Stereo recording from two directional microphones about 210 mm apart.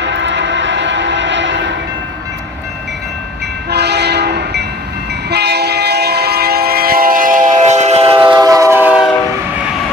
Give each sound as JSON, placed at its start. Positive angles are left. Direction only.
{"t": 0.0, "sound": "vehicle", "side_deg": -55}
{"t": 3.7, "sound": "train", "side_deg": -50}